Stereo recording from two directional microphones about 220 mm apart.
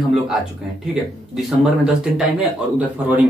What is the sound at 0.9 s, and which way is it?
Speech, centre (ahead or behind).